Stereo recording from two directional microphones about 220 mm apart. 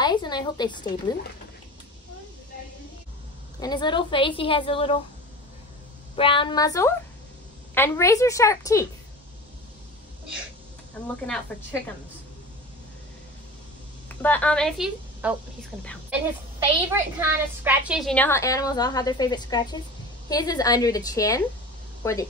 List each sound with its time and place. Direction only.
0.0 s a woman's voice: 20° left (ahead or behind)
3.5 s a woman's voice: 20° left (ahead or behind)
6.1 s a woman's voice: 25° left (ahead or behind)
14.0 s a woman's voice: 5° left (ahead or behind)